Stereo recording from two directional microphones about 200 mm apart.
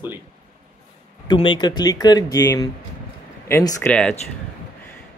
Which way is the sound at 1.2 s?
25° left (ahead or behind).